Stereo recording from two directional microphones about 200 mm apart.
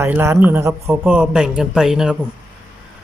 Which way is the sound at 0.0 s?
10° right (ahead or behind).